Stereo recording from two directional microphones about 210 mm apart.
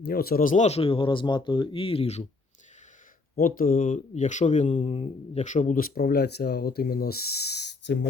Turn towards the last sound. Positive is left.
turn(degrees=55)  # may be behind; listen again after turning